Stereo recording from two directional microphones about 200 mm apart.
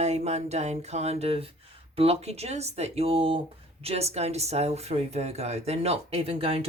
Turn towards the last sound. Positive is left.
turn(degrees=-30)  # may be behind; listen again after turning